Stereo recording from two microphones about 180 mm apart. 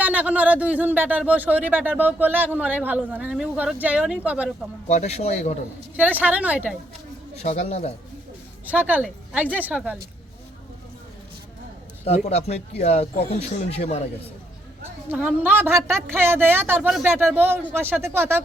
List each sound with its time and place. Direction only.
0.0 s speech: 10° right (ahead or behind)
4.9 s speech: 40° left (ahead or behind)
6.0 s speech: 10° right (ahead or behind)
7.4 s speech: 35° left (ahead or behind)
8.6 s speech: 10° right (ahead or behind)
12.0 s speech: 35° left (ahead or behind)
15.1 s speech: 10° right (ahead or behind)